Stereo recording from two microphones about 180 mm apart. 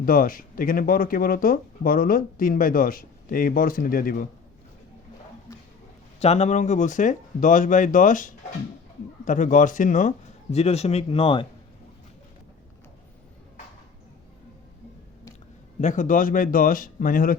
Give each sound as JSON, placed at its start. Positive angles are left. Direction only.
{"t": 0.0, "sound": "speech", "side_deg": 50}
{"t": 6.1, "sound": "speech", "side_deg": 40}
{"t": 15.8, "sound": "speech", "side_deg": 45}